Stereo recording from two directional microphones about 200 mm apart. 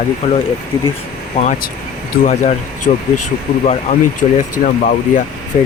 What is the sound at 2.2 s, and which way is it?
Speech, 35° left (ahead or behind).